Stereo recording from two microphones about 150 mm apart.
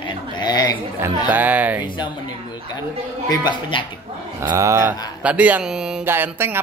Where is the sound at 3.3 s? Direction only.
30° left (ahead or behind).